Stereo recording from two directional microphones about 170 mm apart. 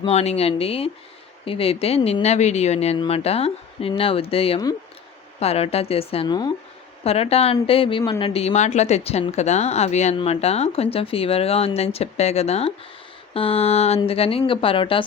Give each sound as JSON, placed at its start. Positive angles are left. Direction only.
{"t": 0.0, "sound": "speech", "side_deg": 40}
{"t": 7.0, "sound": "speech", "side_deg": 35}